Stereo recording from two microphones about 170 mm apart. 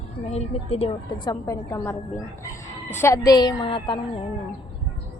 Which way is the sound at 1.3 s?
20° left (ahead or behind).